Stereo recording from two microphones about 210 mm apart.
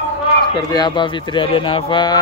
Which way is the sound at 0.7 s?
20° left (ahead or behind).